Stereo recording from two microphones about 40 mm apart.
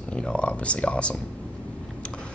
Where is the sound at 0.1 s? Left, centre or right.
Left.